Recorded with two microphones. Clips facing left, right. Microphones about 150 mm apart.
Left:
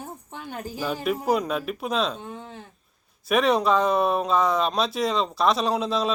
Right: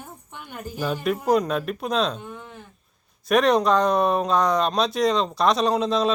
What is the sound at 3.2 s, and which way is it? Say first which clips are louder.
Speech: right 2 dB; 5° left (ahead or behind).